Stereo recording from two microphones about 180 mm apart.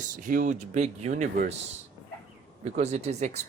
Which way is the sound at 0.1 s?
50° right (ahead or behind).